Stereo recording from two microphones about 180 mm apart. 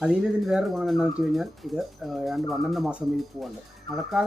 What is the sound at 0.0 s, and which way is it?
Speech, 5° right (ahead or behind).